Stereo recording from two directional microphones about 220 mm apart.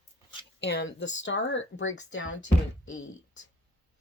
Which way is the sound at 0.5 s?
50° left (ahead or behind).